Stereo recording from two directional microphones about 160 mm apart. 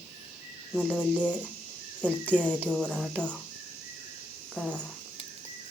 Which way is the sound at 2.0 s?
10° left (ahead or behind).